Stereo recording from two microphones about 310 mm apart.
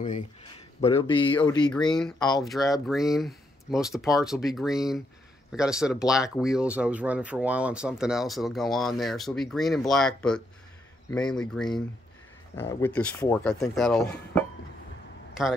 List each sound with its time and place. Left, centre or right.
0.7 s a man's voice: centre
2.1 s a man's voice: centre
2.4 s speech: centre